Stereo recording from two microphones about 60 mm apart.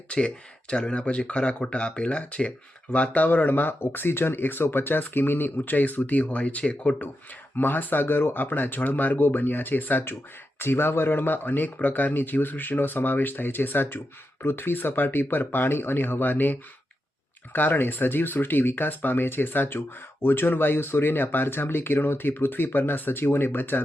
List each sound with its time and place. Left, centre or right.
0.1 s speech: centre
7.5 s speech: left